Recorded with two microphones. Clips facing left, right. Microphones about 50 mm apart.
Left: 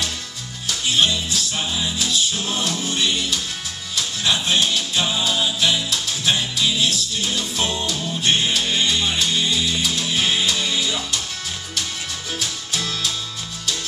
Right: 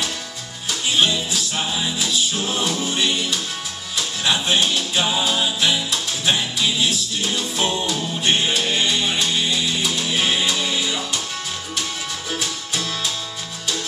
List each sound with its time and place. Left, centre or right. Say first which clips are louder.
0.7 s music: even; centre
12.3 s music: right 1 dB; centre